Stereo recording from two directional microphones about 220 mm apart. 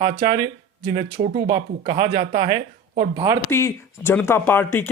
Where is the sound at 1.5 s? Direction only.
20° right (ahead or behind).